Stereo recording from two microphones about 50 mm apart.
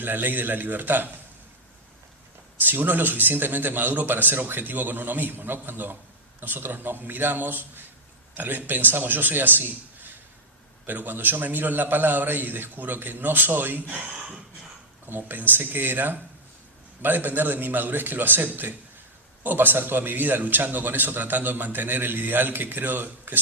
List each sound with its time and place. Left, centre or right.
0.0 s a man's voice: right
2.6 s a man's voice: right
15.0 s a man's voice: right